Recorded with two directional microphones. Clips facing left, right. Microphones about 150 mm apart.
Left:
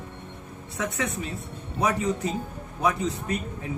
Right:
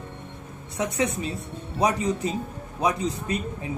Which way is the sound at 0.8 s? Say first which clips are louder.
Right 2 dB; 20° right (ahead or behind).